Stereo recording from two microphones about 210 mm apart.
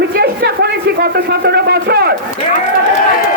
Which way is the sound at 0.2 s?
50° right (ahead or behind).